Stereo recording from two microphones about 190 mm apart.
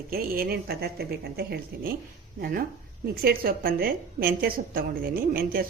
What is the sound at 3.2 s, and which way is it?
Speech, 50° right (ahead or behind).